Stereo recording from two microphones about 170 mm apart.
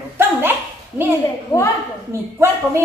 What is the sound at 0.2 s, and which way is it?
Dog, 15° right (ahead or behind).